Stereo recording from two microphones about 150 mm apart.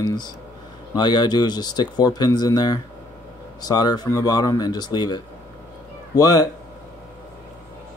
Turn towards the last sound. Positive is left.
turn(degrees=25)  # may be behind; listen again after turning